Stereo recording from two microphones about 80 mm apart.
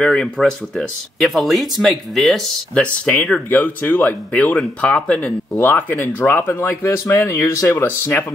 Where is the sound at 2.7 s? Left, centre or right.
Centre.